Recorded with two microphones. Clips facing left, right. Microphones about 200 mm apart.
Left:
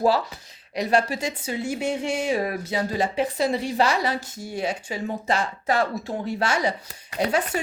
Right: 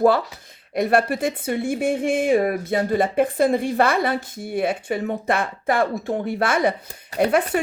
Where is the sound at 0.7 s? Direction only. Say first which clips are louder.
Right 3 dB; 55° right (ahead or behind).